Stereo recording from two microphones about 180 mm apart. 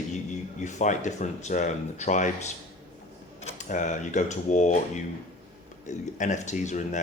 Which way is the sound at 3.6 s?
45° left (ahead or behind).